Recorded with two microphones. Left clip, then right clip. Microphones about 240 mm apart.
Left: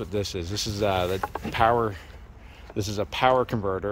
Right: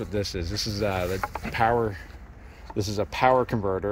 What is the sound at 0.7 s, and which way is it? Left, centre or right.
Speech, centre.